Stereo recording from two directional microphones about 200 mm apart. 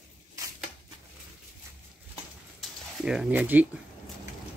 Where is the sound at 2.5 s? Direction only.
5° right (ahead or behind).